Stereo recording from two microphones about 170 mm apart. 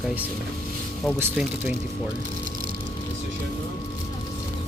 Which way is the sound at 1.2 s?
10° right (ahead or behind).